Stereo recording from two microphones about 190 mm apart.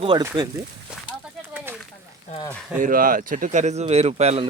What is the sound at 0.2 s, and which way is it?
Speech, 15° right (ahead or behind).